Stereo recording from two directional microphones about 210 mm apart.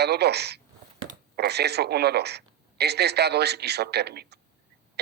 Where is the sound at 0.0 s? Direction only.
50° right (ahead or behind).